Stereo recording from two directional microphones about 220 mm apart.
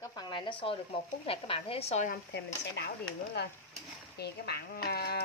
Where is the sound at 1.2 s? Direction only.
25° left (ahead or behind).